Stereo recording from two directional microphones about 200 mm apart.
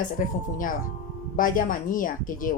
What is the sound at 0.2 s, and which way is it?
Speech, 40° left (ahead or behind).